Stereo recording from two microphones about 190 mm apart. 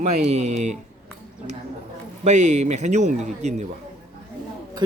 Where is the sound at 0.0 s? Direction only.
35° right (ahead or behind).